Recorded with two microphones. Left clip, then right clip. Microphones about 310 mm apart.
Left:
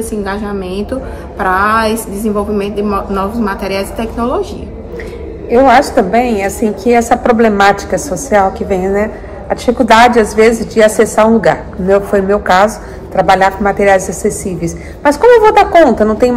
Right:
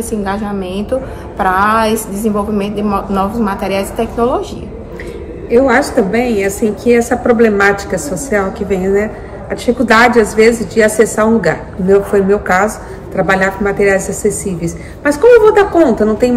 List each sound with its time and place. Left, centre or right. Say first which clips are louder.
0.0 s a woman's voice: even; centre
5.5 s a woman's voice: left 3 dB; centre